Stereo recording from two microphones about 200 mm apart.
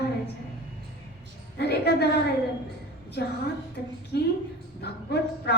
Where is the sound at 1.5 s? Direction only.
55° left (ahead or behind).